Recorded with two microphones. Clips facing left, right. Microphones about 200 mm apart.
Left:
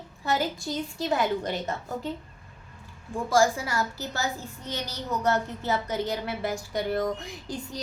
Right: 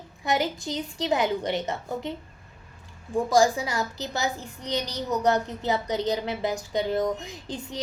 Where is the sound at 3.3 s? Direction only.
15° right (ahead or behind).